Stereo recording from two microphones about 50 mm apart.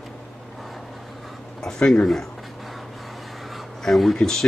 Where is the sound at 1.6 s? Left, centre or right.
Centre.